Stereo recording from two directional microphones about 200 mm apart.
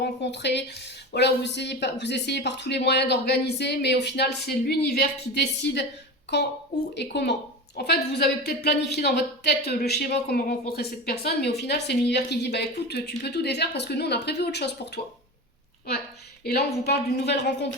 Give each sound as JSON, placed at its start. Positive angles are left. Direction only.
{"t": 0.0, "sound": "speech", "side_deg": 60}
{"t": 6.9, "sound": "a woman's voice", "side_deg": 60}
{"t": 16.4, "sound": "a woman's voice", "side_deg": 55}